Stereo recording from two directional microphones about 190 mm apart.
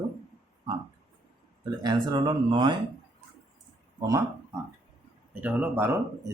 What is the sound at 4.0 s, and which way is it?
Speech, 20° right (ahead or behind).